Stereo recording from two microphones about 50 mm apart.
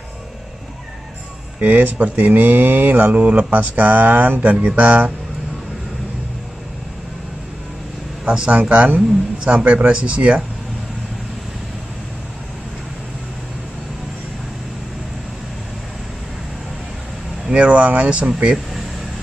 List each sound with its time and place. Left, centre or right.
1.6 s speech: right
8.3 s a man's voice: right
17.5 s a man's voice: right